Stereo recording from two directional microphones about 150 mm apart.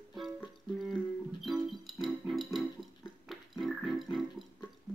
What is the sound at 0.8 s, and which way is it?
Music, centre (ahead or behind).